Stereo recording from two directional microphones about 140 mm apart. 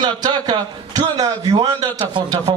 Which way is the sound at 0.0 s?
30° right (ahead or behind).